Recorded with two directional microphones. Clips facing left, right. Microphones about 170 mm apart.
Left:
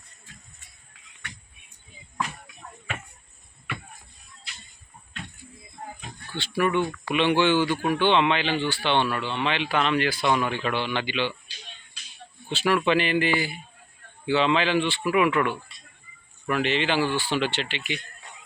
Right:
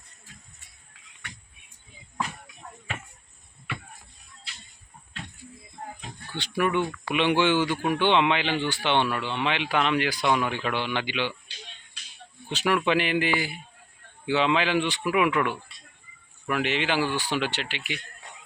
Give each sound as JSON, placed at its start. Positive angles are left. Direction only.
{"t": 6.3, "sound": "speech", "side_deg": -15}
{"t": 12.5, "sound": "speech", "side_deg": -15}